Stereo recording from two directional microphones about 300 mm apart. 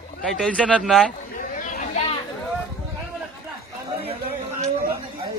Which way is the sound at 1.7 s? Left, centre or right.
Left.